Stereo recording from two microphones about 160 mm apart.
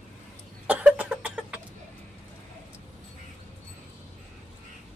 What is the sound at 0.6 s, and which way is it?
Cough, 10° right (ahead or behind).